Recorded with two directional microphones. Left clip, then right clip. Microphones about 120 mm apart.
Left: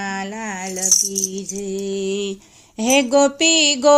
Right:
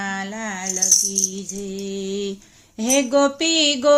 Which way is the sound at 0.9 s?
60° left (ahead or behind).